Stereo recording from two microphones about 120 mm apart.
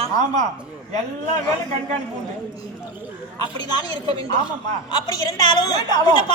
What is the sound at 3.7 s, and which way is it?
Speech, 35° left (ahead or behind).